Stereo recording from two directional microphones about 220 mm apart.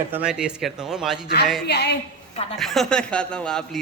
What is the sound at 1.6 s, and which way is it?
Speech, 50° left (ahead or behind).